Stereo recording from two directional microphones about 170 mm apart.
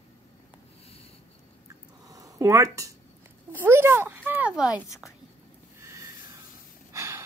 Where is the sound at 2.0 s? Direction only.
20° right (ahead or behind).